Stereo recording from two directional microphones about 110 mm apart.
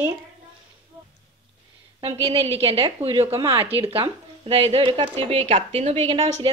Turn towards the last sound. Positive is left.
turn(degrees=-60)  # may be behind; listen again after turning